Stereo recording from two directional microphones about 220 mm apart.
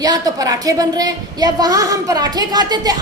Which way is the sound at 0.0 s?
15° right (ahead or behind).